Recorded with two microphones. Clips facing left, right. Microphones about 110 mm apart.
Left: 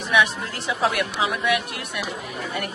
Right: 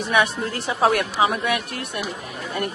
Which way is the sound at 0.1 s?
40° right (ahead or behind).